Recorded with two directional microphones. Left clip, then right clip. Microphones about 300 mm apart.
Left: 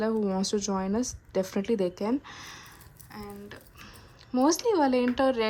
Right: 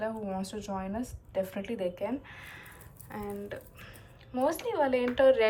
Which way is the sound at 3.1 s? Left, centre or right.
Centre.